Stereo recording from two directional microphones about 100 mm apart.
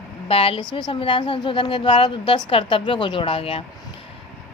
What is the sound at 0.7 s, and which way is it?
A woman's voice, 55° left (ahead or behind).